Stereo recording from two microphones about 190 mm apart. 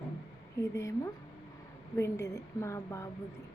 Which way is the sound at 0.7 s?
15° left (ahead or behind).